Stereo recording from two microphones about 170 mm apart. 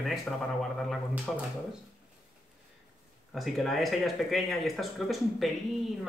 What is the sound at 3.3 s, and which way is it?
A man's voice, centre (ahead or behind).